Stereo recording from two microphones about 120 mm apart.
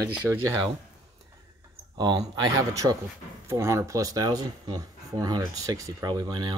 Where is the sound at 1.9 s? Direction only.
35° right (ahead or behind).